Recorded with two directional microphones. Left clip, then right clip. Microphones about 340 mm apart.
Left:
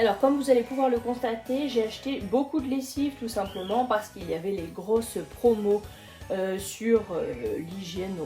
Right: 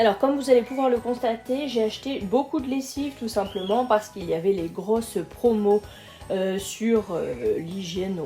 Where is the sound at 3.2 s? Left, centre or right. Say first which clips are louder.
Right 5 dB; right.